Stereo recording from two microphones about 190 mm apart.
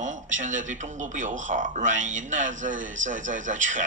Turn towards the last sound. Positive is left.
turn(degrees=-40)  # may be behind; listen again after turning